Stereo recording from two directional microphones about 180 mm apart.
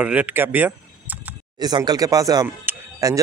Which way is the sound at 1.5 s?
25° right (ahead or behind).